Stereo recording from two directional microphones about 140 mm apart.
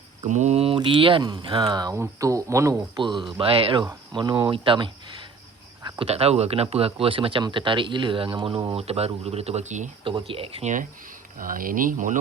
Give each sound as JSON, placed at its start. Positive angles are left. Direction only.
{"t": 0.3, "sound": "speech", "side_deg": -55}
{"t": 2.9, "sound": "speech", "side_deg": -35}
{"t": 10.0, "sound": "speech", "side_deg": -35}
{"t": 11.3, "sound": "speech", "side_deg": -80}